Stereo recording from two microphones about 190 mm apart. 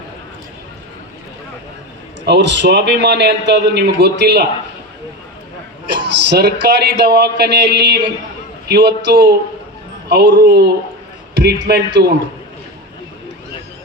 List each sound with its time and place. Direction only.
2.2 s a man's voice: 65° right (ahead or behind)
6.1 s a man's voice: 65° right (ahead or behind)